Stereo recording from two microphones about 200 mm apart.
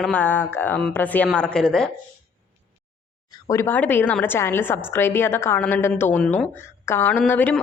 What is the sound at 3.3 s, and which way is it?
Speech, 15° left (ahead or behind).